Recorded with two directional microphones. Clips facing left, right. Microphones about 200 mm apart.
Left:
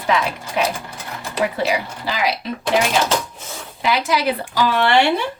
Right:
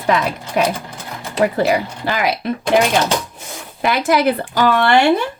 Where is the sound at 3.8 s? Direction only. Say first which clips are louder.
Right 4 dB; 55° right (ahead or behind).